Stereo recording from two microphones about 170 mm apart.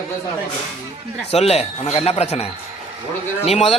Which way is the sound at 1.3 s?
35° left (ahead or behind).